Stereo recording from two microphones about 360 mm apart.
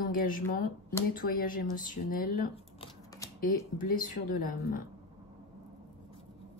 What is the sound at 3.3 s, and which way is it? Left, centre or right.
Speech, left.